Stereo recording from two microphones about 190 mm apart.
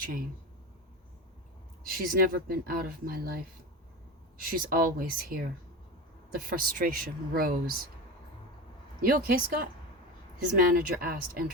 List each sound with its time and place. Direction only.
1.9 s speech: 50° right (ahead or behind)
9.0 s speech: 50° right (ahead or behind)
10.8 s speech: 50° right (ahead or behind)